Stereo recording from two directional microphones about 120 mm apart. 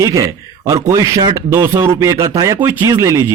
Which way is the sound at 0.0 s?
25° right (ahead or behind).